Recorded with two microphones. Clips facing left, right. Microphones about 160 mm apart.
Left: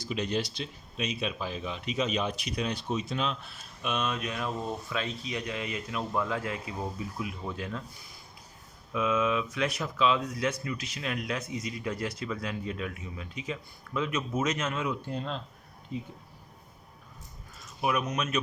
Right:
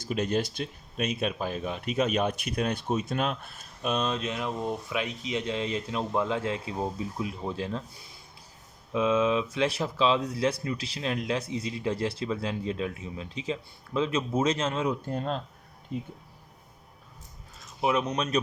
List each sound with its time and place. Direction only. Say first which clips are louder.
0.0 s speech: right 3 dB; 50° right (ahead or behind); by 7.8 s 30° right (ahead or behind)
8.9 s speech: right 3 dB; 30° right (ahead or behind)
15.1 s speech: right 4 dB; 45° right (ahead or behind)
17.7 s speech: right 3 dB; 25° right (ahead or behind)